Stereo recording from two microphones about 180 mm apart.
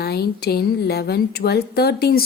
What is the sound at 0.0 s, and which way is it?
A woman's voice, 60° left (ahead or behind).